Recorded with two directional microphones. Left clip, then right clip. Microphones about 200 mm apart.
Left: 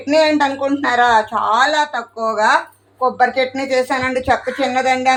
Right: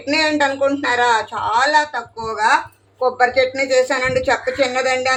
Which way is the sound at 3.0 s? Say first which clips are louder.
Even; 25° left (ahead or behind).